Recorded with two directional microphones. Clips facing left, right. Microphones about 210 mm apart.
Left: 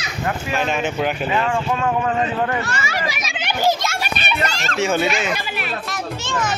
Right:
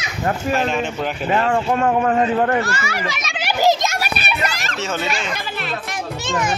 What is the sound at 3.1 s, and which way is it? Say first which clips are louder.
Speech: right 1 dB; 5° left (ahead or behind).